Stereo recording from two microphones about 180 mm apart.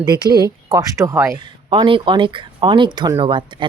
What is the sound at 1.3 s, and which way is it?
Speech, 30° right (ahead or behind).